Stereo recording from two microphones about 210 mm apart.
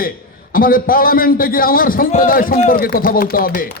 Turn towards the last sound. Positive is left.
turn(degrees=40)  # may be behind; listen again after turning